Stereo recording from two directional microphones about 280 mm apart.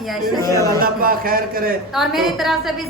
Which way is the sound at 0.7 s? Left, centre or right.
Right.